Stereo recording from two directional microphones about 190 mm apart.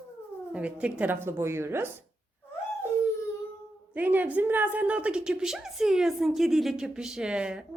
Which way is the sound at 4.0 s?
10° right (ahead or behind).